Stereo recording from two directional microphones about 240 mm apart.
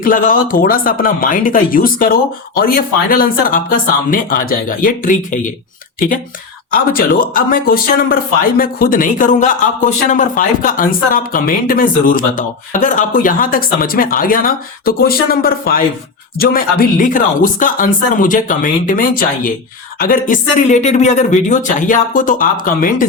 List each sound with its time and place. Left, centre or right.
0.0 s speech: left
6.7 s speech: left